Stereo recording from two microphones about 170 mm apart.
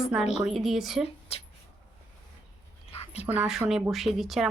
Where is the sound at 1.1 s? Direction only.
35° left (ahead or behind).